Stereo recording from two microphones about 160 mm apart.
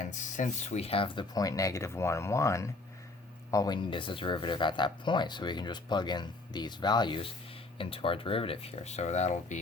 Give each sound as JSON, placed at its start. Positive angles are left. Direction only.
{"t": 0.0, "sound": "speech", "side_deg": 50}